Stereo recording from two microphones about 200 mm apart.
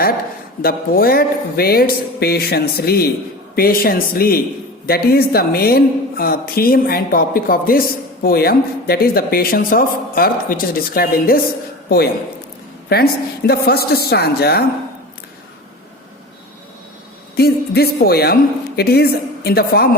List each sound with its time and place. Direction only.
0.6 s a woman's voice: 50° left (ahead or behind)
17.3 s a woman's voice: 50° left (ahead or behind)